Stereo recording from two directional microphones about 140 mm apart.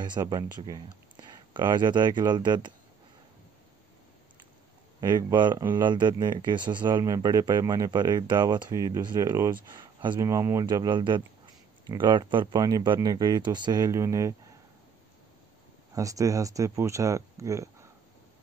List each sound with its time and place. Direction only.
0.0 s speech: 30° right (ahead or behind)
5.0 s speech: 30° right (ahead or behind)
15.9 s speech: 25° right (ahead or behind)